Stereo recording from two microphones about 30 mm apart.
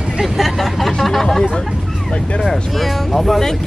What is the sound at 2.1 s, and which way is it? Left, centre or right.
Speech, left.